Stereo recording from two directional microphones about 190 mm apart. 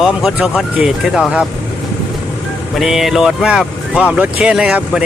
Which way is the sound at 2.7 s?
Centre (ahead or behind).